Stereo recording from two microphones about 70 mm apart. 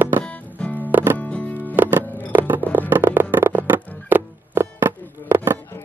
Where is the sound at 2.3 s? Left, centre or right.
Right.